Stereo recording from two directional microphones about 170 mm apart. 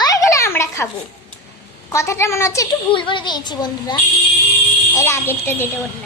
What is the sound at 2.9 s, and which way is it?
A woman's voice, 30° left (ahead or behind).